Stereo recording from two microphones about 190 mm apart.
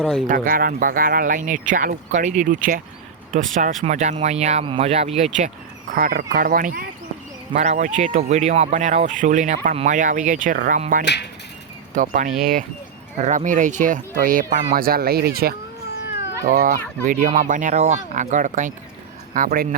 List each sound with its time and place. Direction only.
0.0 s speech: centre (ahead or behind)
0.3 s speech: 45° right (ahead or behind)
5.9 s speech: 50° right (ahead or behind)
11.0 s speech: 65° left (ahead or behind)
11.9 s speech: 40° right (ahead or behind)